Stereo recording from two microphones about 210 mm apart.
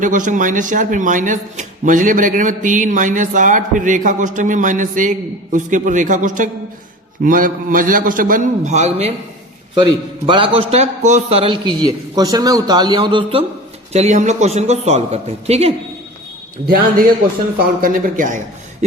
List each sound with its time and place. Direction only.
0.0 s a man's voice: 40° right (ahead or behind)
17.7 s a man's voice: 40° right (ahead or behind)